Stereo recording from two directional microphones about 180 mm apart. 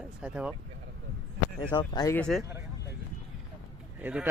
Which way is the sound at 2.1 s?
5° left (ahead or behind).